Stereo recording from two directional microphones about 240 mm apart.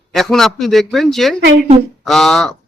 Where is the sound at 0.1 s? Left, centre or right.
Centre.